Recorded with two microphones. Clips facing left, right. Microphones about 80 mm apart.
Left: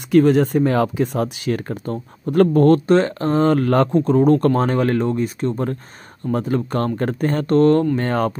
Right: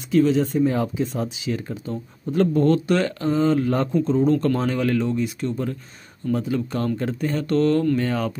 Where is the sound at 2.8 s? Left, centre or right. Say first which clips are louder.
Left 5 dB; left.